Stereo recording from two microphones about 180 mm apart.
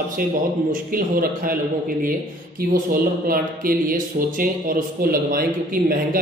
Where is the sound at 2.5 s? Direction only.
55° right (ahead or behind).